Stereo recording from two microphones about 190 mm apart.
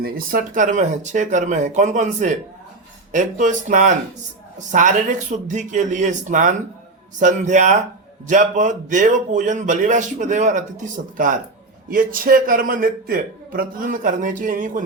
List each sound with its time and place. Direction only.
0.0 s speech: 50° right (ahead or behind)
11.9 s a man's voice: 45° right (ahead or behind)